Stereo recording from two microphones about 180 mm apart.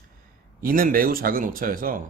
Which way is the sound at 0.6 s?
50° right (ahead or behind).